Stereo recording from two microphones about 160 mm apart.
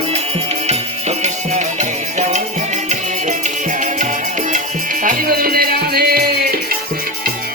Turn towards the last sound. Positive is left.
turn(degrees=-70)  # may be behind; listen again after turning